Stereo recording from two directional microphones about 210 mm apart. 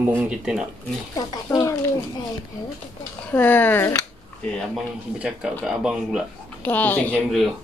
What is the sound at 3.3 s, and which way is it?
Speech, 10° left (ahead or behind).